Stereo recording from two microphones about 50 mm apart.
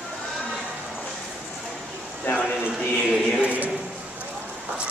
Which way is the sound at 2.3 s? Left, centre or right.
Left.